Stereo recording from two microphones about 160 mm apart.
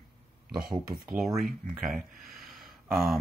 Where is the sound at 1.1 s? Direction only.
Centre (ahead or behind).